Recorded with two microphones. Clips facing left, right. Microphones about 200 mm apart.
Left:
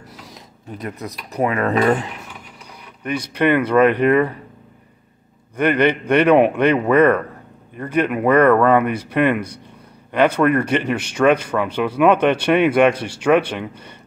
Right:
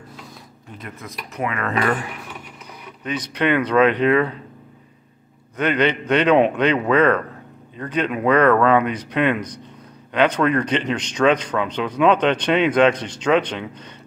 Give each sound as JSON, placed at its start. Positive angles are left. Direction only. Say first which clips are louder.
{"t": 0.7, "sound": "speech", "louder": "left 6 dB", "side_deg": 40}
{"t": 3.0, "sound": "speech", "louder": "left 3 dB", "side_deg": 10}
{"t": 5.6, "sound": "speech", "louder": "left 3 dB", "side_deg": 10}